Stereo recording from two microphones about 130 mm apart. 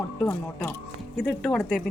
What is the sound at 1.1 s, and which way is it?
Speech, centre (ahead or behind).